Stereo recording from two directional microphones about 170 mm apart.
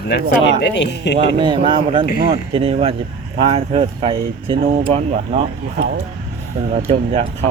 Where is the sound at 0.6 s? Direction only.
90° left.